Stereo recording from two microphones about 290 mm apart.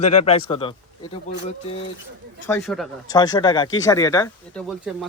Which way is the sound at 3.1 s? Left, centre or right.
Centre.